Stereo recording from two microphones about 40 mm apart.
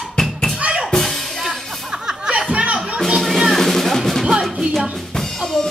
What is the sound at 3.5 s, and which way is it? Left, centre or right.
Music, centre.